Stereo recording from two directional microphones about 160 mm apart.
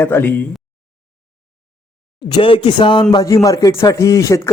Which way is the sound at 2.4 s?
30° left (ahead or behind).